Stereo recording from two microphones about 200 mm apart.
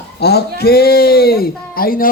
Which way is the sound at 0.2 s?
55° left (ahead or behind).